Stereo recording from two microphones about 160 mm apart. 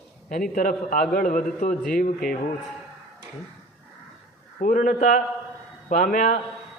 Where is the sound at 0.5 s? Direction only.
55° left (ahead or behind).